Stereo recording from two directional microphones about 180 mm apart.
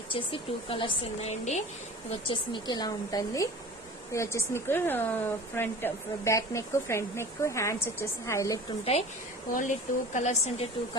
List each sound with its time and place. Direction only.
0.1 s a woman's voice: 30° left (ahead or behind)
8.8 s a woman's voice: 35° left (ahead or behind)
9.5 s a woman's voice: 45° left (ahead or behind)